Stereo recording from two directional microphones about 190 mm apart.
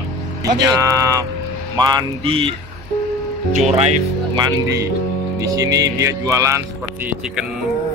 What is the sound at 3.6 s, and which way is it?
Speech, 35° right (ahead or behind).